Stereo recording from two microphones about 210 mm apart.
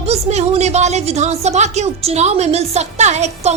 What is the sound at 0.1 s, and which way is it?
Speech, 30° right (ahead or behind).